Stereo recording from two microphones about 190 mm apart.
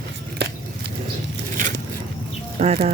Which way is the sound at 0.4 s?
60° right (ahead or behind).